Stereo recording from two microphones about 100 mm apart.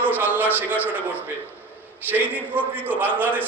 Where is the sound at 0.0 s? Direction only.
20° right (ahead or behind).